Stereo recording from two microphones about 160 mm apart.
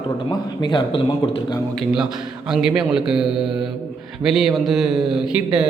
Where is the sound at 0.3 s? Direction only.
30° left (ahead or behind).